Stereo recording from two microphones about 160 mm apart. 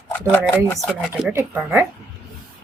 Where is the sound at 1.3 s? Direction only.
15° right (ahead or behind).